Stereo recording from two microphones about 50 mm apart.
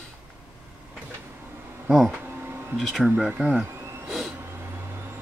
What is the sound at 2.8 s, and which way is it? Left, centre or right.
Speech, centre.